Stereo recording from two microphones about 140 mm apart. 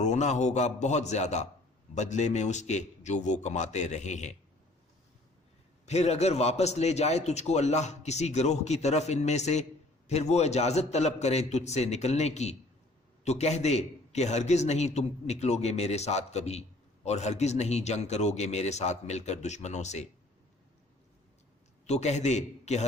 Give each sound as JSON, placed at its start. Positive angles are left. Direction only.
{"t": 0.0, "sound": "a man's voice", "side_deg": 55}
{"t": 5.8, "sound": "a man's voice", "side_deg": 50}
{"t": 21.8, "sound": "a man's voice", "side_deg": 55}